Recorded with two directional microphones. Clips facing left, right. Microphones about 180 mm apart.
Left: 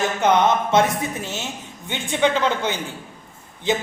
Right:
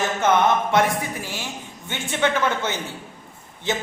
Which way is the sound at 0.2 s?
20° left (ahead or behind).